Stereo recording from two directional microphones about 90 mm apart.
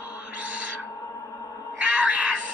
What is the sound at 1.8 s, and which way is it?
Cat, 15° right (ahead or behind).